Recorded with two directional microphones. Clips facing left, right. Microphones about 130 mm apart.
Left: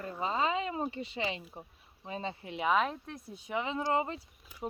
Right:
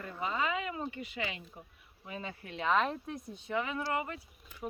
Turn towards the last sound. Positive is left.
turn(degrees=10)  # may be behind; listen again after turning